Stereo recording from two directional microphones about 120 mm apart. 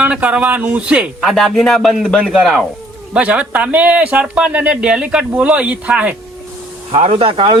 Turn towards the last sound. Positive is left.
turn(degrees=-50)  # may be behind; listen again after turning